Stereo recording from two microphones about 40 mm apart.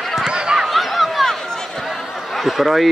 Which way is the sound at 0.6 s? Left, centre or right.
Centre.